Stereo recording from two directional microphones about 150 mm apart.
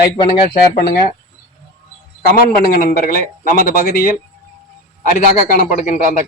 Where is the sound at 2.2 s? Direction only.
75° left (ahead or behind).